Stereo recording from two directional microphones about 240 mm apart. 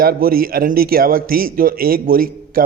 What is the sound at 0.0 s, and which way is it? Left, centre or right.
A man's voice, right.